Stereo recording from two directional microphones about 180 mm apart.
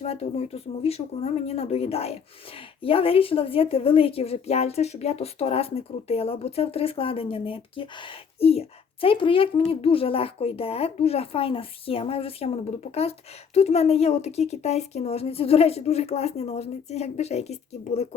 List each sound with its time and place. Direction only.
0.0 s a woman's voice: 35° left (ahead or behind)